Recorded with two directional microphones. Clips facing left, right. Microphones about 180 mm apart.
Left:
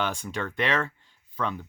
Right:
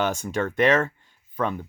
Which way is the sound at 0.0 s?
45° right (ahead or behind).